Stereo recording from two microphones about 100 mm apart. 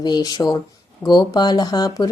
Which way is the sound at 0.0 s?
45° left (ahead or behind).